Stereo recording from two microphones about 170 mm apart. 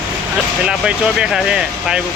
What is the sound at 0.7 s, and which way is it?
Speech, 5° right (ahead or behind).